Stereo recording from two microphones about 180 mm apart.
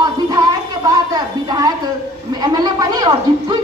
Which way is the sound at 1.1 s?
20° right (ahead or behind).